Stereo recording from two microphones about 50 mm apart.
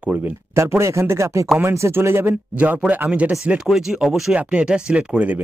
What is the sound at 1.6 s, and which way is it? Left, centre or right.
Speech, right.